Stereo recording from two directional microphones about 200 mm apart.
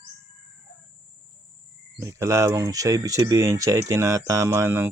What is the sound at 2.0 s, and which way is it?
Chicken, 15° right (ahead or behind).